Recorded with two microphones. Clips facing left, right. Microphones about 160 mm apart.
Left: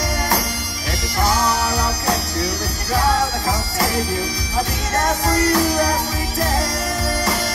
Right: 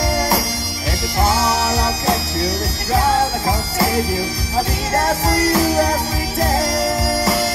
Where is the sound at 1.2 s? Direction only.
25° right (ahead or behind).